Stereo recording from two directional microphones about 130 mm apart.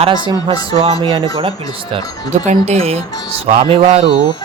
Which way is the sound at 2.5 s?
55° right (ahead or behind).